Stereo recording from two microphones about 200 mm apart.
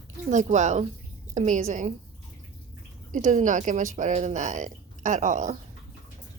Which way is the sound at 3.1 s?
40° right (ahead or behind).